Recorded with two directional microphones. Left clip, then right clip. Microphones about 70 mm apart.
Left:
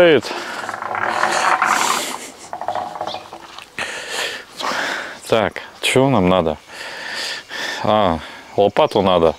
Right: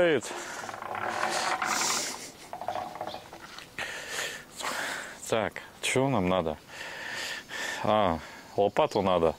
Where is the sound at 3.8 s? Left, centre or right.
Left.